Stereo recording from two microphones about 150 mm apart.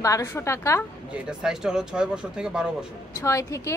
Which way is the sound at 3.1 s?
20° left (ahead or behind).